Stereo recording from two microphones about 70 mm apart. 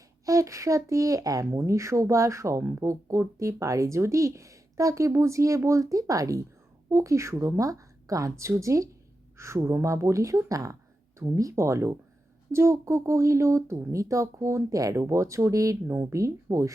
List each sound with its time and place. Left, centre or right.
0.3 s speech: right
1.5 s speech: right
15.9 s speech: right